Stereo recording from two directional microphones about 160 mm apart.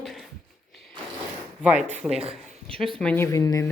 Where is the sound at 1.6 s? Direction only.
10° right (ahead or behind).